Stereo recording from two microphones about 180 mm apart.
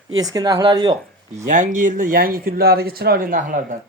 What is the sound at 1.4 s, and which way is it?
Speech, 45° right (ahead or behind).